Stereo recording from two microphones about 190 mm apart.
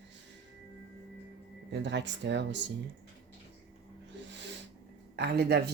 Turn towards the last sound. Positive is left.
turn(degrees=-60)  # may be behind; listen again after turning